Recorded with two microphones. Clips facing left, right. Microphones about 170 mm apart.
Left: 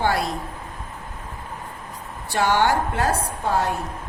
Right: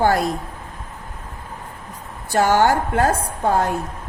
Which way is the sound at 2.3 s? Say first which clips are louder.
Right 4 dB; 45° right (ahead or behind).